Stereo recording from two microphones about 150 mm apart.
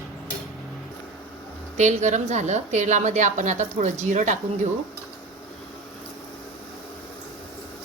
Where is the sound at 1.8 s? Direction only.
50° right (ahead or behind).